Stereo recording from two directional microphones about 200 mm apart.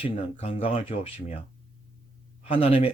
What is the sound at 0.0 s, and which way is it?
Speech, 30° left (ahead or behind).